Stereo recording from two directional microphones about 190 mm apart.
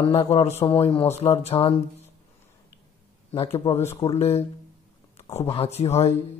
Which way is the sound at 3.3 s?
30° left (ahead or behind).